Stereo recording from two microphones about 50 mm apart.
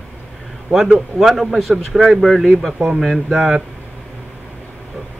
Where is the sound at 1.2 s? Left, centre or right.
Centre.